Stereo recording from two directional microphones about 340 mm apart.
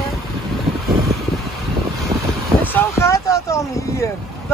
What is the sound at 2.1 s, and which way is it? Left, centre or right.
Vehicle, centre.